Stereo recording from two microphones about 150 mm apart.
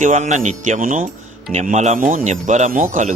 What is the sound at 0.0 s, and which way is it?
Speech, 50° right (ahead or behind).